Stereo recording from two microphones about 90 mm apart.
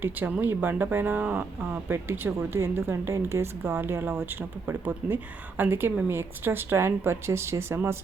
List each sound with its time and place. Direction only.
0.0 s speech: 20° right (ahead or behind)